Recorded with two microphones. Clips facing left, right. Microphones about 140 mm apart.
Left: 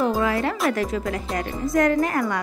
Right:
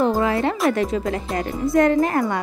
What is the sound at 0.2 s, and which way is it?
Music, 25° right (ahead or behind).